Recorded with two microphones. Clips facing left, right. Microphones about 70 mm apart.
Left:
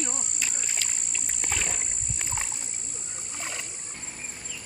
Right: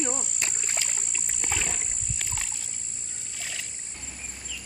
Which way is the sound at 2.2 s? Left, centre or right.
Left.